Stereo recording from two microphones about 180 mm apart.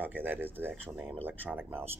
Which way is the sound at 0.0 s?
10° right (ahead or behind).